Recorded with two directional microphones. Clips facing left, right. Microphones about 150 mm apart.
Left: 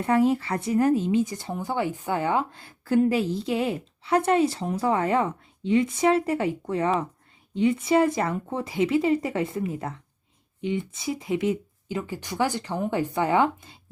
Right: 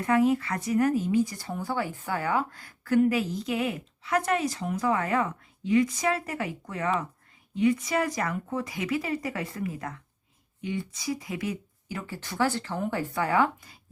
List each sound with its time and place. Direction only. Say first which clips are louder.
0.0 s speech: left 2 dB; 30° left (ahead or behind)